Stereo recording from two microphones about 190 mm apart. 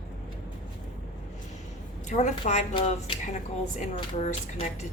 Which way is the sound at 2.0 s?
40° left (ahead or behind).